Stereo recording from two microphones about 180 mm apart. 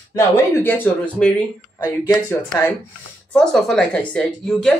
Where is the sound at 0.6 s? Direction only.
10° left (ahead or behind).